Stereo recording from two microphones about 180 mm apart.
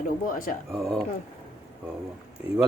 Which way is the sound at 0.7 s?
5° right (ahead or behind).